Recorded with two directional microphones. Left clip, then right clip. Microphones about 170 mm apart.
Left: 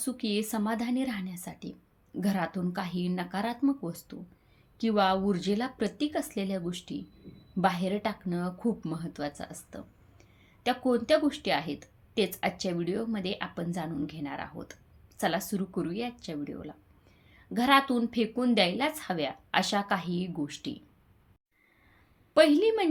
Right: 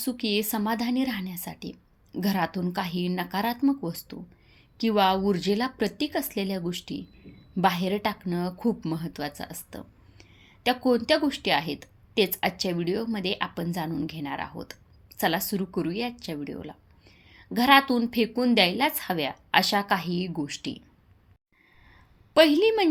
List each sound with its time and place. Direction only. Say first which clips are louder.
0.0 s a woman's voice: right 5 dB; 15° right (ahead or behind)
22.4 s a woman's voice: right 3 dB; 15° right (ahead or behind)